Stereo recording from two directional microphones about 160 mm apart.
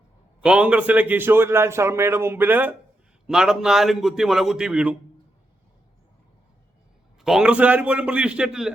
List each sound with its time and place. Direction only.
0.4 s a man's voice: 5° right (ahead or behind)
7.2 s a man's voice: 5° right (ahead or behind)